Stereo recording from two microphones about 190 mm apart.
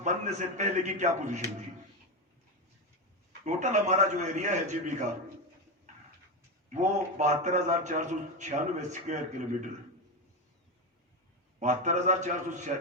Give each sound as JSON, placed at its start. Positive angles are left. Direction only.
{"t": 0.0, "sound": "a man's voice", "side_deg": -40}
{"t": 3.4, "sound": "a man's voice", "side_deg": -40}
{"t": 6.7, "sound": "a man's voice", "side_deg": -40}
{"t": 11.6, "sound": "a man's voice", "side_deg": -40}